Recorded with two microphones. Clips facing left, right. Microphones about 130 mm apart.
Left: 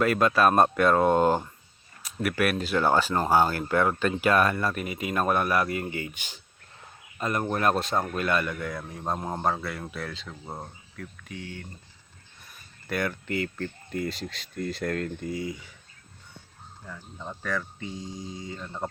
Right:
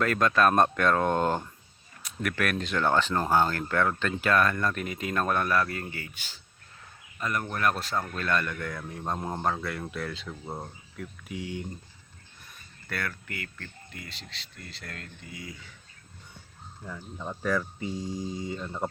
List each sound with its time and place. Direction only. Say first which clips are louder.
0.0 s speech: left 2 dB; 10° left (ahead or behind); by 11.7 s 15° right (ahead or behind)
12.9 s speech: left 7 dB; 20° left (ahead or behind)
13.9 s speech: left 13 dB; 45° left (ahead or behind)
15.3 s speech: left 7 dB; 30° left (ahead or behind)
16.8 s speech: right 2 dB; 5° right (ahead or behind)